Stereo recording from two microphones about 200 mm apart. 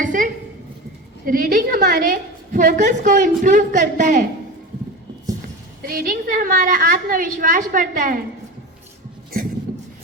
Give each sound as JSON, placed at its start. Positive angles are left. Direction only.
{"t": 0.0, "sound": "a sound", "side_deg": -40}
{"t": 1.2, "sound": "a woman's voice", "side_deg": -45}
{"t": 5.8, "sound": "a woman's voice", "side_deg": -45}